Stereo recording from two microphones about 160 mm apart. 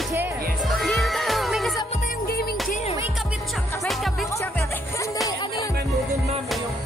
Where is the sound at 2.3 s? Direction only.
70° left (ahead or behind).